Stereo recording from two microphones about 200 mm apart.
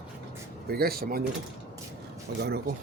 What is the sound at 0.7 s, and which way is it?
Speech, 50° right (ahead or behind).